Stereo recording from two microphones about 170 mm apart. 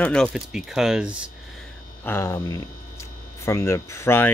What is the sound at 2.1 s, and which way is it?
Speech, 15° left (ahead or behind).